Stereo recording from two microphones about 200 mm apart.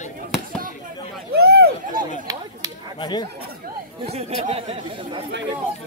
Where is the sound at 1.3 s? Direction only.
55° right (ahead or behind).